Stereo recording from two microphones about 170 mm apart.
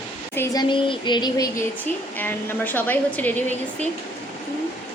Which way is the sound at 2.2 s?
10° left (ahead or behind).